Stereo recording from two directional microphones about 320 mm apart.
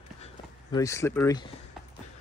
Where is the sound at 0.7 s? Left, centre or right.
Centre.